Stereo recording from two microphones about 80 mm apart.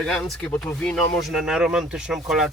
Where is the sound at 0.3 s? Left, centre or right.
Centre.